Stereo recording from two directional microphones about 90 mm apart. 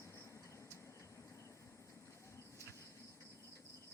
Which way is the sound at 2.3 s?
35° left (ahead or behind).